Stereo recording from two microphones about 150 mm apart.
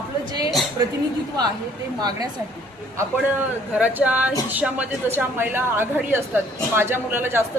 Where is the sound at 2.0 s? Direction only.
25° right (ahead or behind).